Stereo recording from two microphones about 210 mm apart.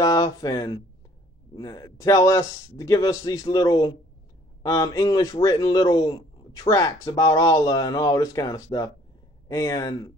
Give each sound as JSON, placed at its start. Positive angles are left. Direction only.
{"t": 0.0, "sound": "speech", "side_deg": 15}